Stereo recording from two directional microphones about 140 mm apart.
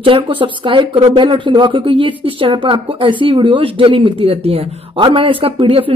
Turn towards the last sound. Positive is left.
turn(degrees=-40)  # may be behind; listen again after turning